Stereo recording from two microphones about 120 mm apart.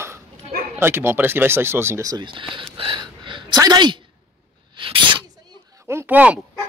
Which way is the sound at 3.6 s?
35° right (ahead or behind).